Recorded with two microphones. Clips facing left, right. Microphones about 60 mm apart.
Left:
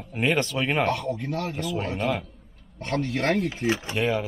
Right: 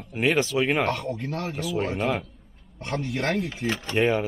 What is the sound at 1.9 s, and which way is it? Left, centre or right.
Speech, centre.